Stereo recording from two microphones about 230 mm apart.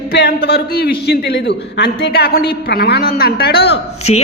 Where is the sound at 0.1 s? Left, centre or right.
Left.